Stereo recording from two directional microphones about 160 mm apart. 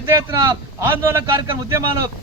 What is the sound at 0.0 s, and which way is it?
A man's voice, 15° right (ahead or behind).